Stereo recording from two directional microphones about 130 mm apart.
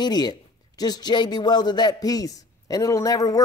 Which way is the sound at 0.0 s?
30° left (ahead or behind).